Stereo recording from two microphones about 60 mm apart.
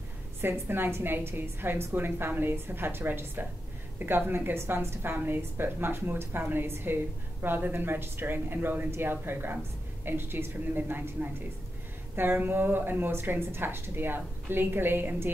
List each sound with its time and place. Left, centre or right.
0.4 s speech: right